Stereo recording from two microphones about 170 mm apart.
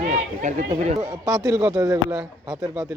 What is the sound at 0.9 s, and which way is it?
Speech, 20° right (ahead or behind).